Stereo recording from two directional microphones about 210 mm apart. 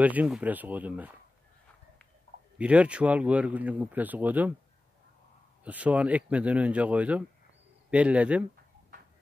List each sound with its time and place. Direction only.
0.0 s speech: 5° right (ahead or behind)
2.6 s speech: 5° right (ahead or behind)
5.6 s speech: 5° right (ahead or behind)